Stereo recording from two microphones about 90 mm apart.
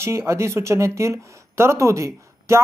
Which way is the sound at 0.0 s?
30° right (ahead or behind).